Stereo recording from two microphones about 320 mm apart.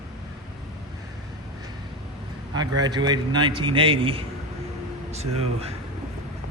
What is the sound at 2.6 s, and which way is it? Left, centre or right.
A man's voice, centre.